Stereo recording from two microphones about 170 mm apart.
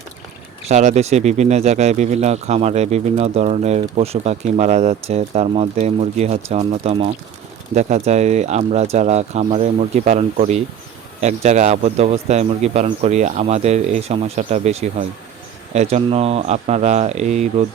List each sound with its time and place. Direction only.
0.7 s speech: 45° right (ahead or behind)